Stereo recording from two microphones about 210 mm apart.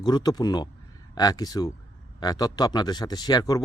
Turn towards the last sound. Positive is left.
turn(degrees=20)  # may be behind; listen again after turning